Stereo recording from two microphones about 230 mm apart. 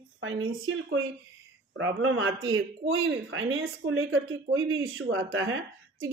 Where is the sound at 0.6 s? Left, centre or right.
Right.